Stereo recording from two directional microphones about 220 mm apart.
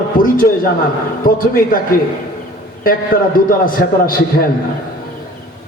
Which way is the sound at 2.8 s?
40° left (ahead or behind).